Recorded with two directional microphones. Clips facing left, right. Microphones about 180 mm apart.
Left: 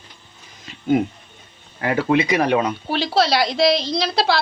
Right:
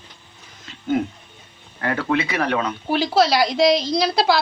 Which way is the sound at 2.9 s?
10° right (ahead or behind).